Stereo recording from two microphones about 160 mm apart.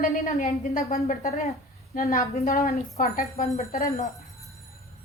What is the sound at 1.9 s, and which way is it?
A woman's voice, 60° left (ahead or behind).